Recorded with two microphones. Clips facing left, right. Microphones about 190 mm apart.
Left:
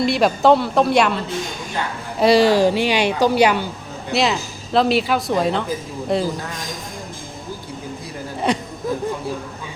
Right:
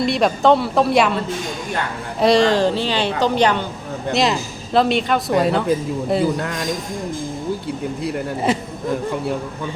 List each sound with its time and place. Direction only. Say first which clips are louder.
0.0 s speech: even; centre (ahead or behind)
2.2 s a woman's voice: left 1 dB; 5° left (ahead or behind)
6.4 s speech: right 6 dB; 65° right (ahead or behind)
8.5 s speech: even; 5° right (ahead or behind)